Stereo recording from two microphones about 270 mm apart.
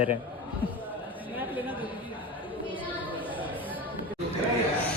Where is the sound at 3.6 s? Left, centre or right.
Centre.